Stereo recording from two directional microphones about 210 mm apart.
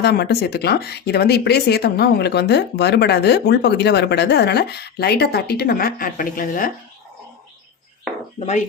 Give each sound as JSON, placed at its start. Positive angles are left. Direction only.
{"t": 0.0, "sound": "speech", "side_deg": 50}